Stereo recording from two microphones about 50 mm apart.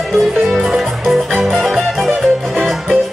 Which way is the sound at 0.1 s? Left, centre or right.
Centre.